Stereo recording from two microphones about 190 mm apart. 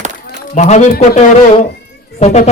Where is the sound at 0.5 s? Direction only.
40° left (ahead or behind).